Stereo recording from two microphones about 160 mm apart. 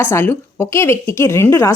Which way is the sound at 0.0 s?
15° left (ahead or behind).